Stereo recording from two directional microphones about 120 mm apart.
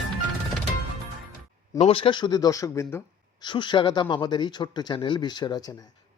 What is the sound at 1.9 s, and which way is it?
Speech, 45° left (ahead or behind).